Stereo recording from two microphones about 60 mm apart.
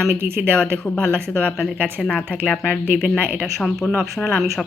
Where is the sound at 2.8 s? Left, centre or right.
Right.